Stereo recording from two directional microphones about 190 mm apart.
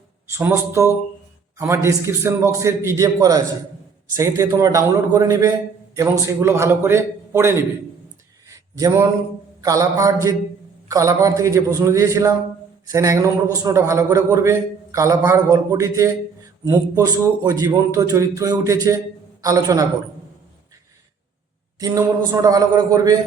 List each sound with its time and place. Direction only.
0.3 s a man's voice: 15° right (ahead or behind)
8.4 s a sound: 15° right (ahead or behind)
9.6 s a man's voice: 20° right (ahead or behind)
21.8 s a man's voice: 20° right (ahead or behind)